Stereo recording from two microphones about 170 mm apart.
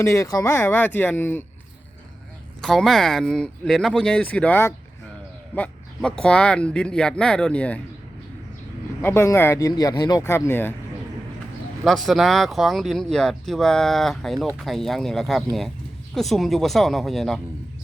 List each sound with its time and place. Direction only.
0.0 s speech: 20° left (ahead or behind)
2.6 s speech: 5° left (ahead or behind)
9.0 s speech: 15° left (ahead or behind)
11.9 s speech: centre (ahead or behind)